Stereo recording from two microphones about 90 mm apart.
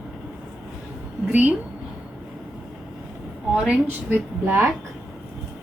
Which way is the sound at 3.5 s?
10° right (ahead or behind).